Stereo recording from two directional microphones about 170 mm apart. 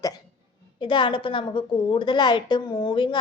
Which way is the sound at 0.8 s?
30° left (ahead or behind).